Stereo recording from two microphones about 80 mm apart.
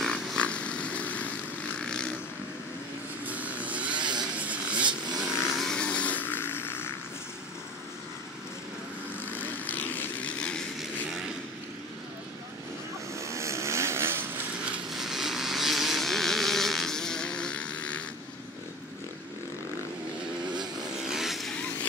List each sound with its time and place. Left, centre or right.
0.0 s vehicle: centre
0.4 s vehicle: centre
3.3 s vehicle: centre
3.9 s vehicle: right
4.4 s vehicle: centre
5.6 s a sound: centre; by 6.9 s left
9.2 s vehicle: left
10.8 s vehicle: centre
13.1 s vehicle: right
14.9 s vehicle: centre
20.8 s vehicle: centre